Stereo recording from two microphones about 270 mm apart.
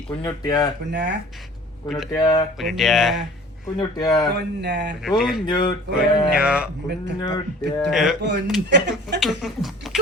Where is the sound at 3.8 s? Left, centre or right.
Centre.